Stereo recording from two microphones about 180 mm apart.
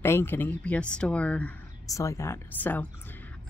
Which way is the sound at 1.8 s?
20° left (ahead or behind).